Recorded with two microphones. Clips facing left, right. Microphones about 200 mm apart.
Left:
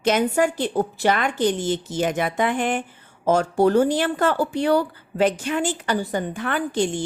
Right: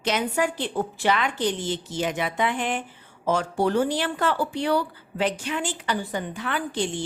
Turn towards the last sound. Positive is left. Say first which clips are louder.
# left 4 dB
turn(degrees=45)  # may be behind; listen again after turning